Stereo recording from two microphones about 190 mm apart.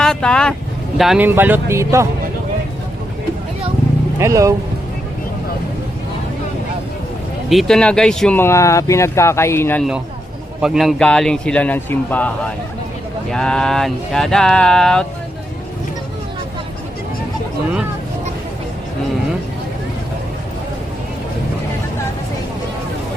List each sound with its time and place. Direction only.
0.0 s speech: 5° left (ahead or behind); by 2.0 s 15° right (ahead or behind)
4.2 s speech: 15° right (ahead or behind)
7.5 s speech: centre (ahead or behind)
10.6 s speech: centre (ahead or behind)
13.3 s speech: 5° left (ahead or behind)